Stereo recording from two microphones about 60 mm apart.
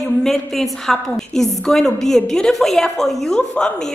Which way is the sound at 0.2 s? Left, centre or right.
Centre.